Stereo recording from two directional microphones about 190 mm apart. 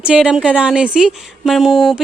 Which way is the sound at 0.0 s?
5° right (ahead or behind).